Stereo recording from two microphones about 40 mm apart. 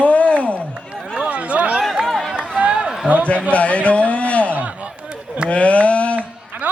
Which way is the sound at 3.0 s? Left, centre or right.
Right.